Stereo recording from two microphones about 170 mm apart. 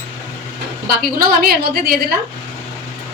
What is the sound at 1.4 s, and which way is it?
Speech, 65° right (ahead or behind).